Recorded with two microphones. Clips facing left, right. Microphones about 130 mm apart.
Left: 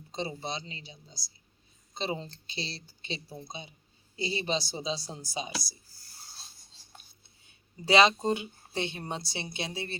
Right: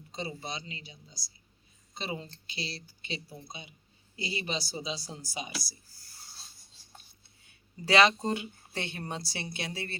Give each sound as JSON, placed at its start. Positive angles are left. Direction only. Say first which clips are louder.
{"t": 0.1, "sound": "a woman's voice", "louder": "left 3 dB", "side_deg": 25}
{"t": 2.0, "sound": "a woman's voice", "louder": "left 4 dB", "side_deg": 30}
{"t": 7.9, "sound": "a woman's voice", "louder": "left 1 dB", "side_deg": 20}